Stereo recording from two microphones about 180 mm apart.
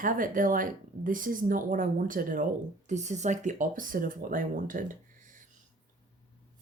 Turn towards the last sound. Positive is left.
turn(degrees=-45)  # may be behind; listen again after turning